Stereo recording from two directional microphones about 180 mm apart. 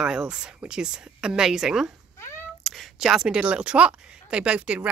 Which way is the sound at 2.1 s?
15° left (ahead or behind).